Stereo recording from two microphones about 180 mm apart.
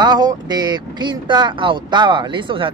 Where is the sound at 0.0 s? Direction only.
25° right (ahead or behind).